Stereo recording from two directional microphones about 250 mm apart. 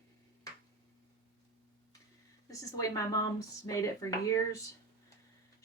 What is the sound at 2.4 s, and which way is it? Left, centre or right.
A woman's voice, centre.